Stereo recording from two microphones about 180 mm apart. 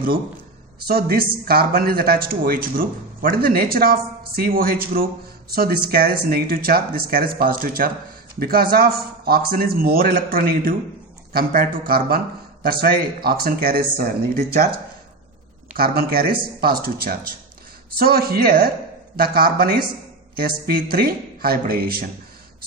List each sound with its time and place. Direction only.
0.9 s speech: 60° right (ahead or behind)
15.7 s speech: 60° right (ahead or behind)